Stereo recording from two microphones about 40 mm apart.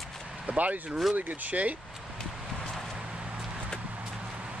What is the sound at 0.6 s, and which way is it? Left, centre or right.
Speech, right.